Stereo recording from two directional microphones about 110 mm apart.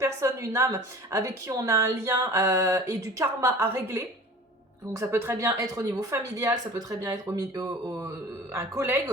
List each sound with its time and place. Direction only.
0.0 s a woman's voice: 25° right (ahead or behind)